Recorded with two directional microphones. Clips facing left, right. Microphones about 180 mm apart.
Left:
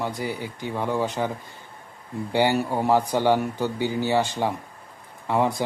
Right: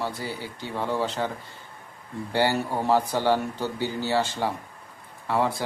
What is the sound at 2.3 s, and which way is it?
A man's voice, 15° left (ahead or behind).